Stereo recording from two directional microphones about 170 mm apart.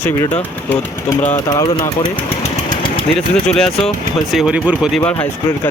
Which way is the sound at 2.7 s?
30° left (ahead or behind).